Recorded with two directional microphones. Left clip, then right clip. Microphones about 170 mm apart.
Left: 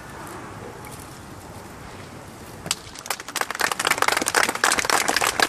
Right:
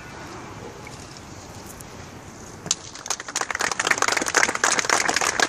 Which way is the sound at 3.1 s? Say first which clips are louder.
Even; 55° right (ahead or behind).